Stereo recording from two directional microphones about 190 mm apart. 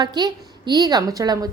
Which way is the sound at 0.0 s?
20° right (ahead or behind).